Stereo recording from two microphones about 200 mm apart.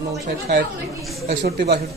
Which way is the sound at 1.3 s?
50° right (ahead or behind).